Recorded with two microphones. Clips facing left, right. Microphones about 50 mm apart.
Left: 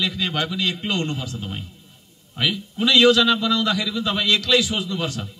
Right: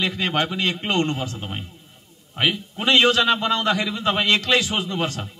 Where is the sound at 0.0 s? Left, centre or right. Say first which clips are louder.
Right 2 dB; right.